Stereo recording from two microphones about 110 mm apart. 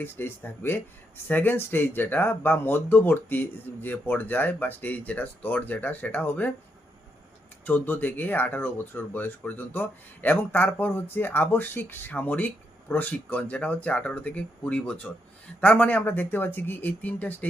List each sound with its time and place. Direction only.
0.0 s speech: 20° left (ahead or behind)
7.6 s speech: 15° left (ahead or behind)